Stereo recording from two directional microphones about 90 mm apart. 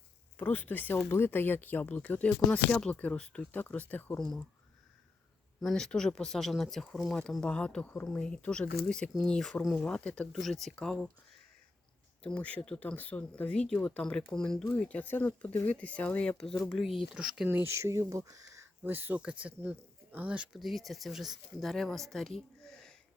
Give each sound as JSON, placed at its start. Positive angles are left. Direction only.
{"t": 0.3, "sound": "speech", "side_deg": 20}
{"t": 5.5, "sound": "speech", "side_deg": 5}
{"t": 7.4, "sound": "speech", "side_deg": 10}
{"t": 9.8, "sound": "speech", "side_deg": 15}
{"t": 12.2, "sound": "speech", "side_deg": 15}
{"t": 17.5, "sound": "speech", "side_deg": -30}
{"t": 18.8, "sound": "speech", "side_deg": -20}
{"t": 20.6, "sound": "speech", "side_deg": 0}